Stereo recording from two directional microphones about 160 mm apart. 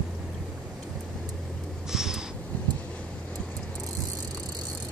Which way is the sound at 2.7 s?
5° left (ahead or behind).